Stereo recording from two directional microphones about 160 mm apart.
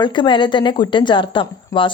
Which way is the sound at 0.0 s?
30° left (ahead or behind).